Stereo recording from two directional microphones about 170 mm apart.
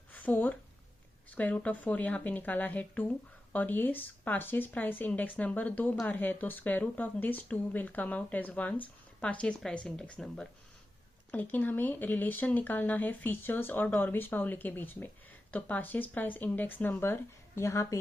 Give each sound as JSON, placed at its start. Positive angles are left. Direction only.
{"t": 0.1, "sound": "speech", "side_deg": 10}